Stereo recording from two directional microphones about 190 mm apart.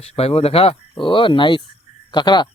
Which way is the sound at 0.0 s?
30° left (ahead or behind).